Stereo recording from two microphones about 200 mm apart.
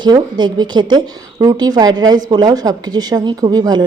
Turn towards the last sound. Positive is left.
turn(degrees=-20)  # may be behind; listen again after turning